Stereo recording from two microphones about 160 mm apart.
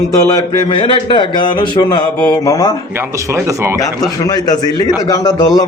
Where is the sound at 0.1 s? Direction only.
20° left (ahead or behind).